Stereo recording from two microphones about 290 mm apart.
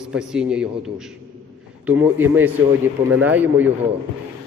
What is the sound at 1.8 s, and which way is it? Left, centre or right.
A man's voice, centre.